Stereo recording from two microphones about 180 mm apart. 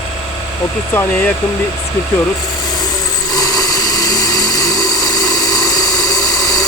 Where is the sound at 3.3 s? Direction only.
20° left (ahead or behind).